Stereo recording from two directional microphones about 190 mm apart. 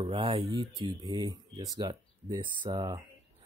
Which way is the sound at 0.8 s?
20° right (ahead or behind).